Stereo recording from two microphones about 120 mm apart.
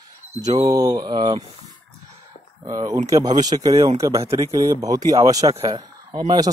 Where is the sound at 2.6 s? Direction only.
30° right (ahead or behind).